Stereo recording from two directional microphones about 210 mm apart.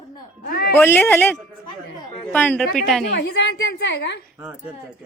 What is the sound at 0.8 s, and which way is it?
A woman's voice, 10° left (ahead or behind).